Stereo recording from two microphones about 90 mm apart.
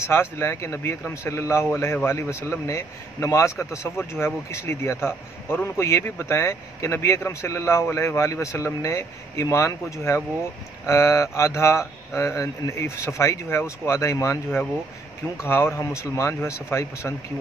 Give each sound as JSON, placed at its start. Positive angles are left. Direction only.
{"t": 0.0, "sound": "a man's voice", "side_deg": 30}